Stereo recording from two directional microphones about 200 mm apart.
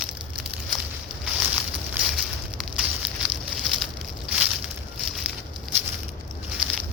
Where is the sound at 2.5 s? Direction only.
5° right (ahead or behind).